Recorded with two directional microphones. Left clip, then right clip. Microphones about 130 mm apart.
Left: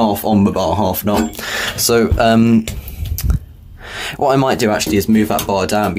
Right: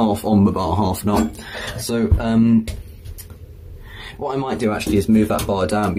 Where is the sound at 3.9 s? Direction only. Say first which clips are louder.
Left 10 dB; 55° left (ahead or behind).